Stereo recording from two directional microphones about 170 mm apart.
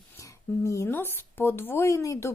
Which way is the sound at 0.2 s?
15° left (ahead or behind).